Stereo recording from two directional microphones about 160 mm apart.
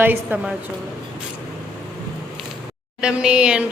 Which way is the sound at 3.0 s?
5° right (ahead or behind).